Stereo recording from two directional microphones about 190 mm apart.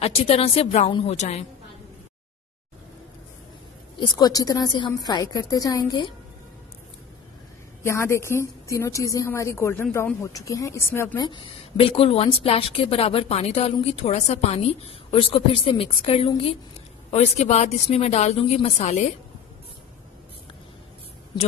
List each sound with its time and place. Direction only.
0.0 s a woman's voice: 30° left (ahead or behind)
4.0 s a woman's voice: 20° left (ahead or behind)
7.8 s a woman's voice: 15° left (ahead or behind); by 19.0 s 35° left (ahead or behind)